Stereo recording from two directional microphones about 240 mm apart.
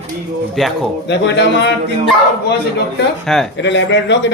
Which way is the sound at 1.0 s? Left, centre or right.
Left.